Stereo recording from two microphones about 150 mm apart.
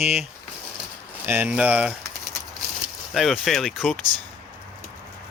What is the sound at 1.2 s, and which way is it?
Speech, 10° right (ahead or behind).